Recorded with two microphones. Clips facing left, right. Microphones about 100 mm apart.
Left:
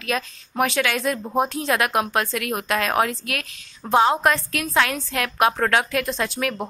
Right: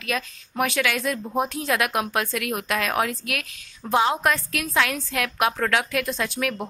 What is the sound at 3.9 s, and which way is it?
Speech, 30° left (ahead or behind).